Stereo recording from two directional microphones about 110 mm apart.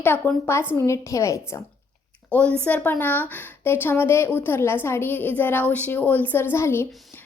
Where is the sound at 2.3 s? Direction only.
10° left (ahead or behind).